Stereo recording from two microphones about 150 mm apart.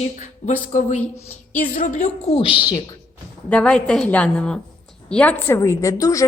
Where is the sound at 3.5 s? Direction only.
5° left (ahead or behind).